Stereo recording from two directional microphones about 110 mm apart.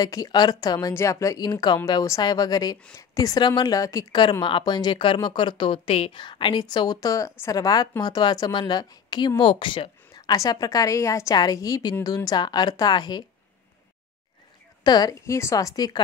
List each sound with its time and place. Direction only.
0.0 s a woman's voice: 35° left (ahead or behind)
4.1 s a woman's voice: 45° left (ahead or behind)
14.8 s a woman's voice: 40° left (ahead or behind)